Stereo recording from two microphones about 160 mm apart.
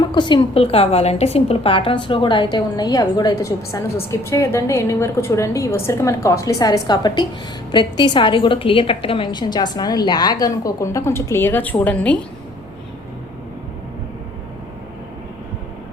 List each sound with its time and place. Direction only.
0.0 s a woman's voice: 30° left (ahead or behind); by 12.1 s 10° left (ahead or behind)